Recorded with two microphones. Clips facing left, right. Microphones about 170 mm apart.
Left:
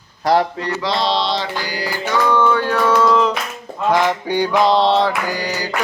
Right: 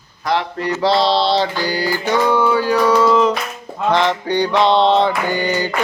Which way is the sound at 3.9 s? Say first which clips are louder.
Even; 5° left (ahead or behind).